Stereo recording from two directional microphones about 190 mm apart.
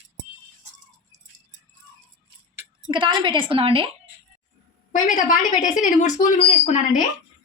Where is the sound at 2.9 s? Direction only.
25° right (ahead or behind).